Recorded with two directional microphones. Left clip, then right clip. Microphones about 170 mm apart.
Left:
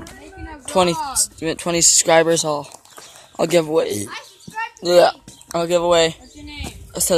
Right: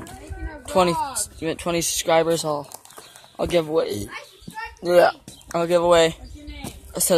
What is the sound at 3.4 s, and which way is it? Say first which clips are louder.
Speech: left 4 dB; 30° left (ahead or behind).